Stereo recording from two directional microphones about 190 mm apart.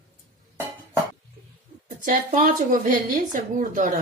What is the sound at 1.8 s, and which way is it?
Speech, 40° right (ahead or behind).